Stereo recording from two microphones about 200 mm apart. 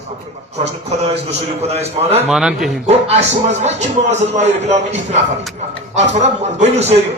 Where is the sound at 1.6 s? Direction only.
30° right (ahead or behind).